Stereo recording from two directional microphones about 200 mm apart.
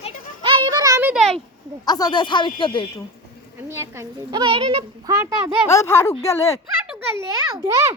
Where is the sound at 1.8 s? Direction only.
20° left (ahead or behind).